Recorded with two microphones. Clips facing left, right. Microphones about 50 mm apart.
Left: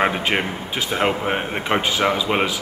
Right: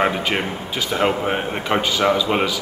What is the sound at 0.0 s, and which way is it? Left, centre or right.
Speech, centre.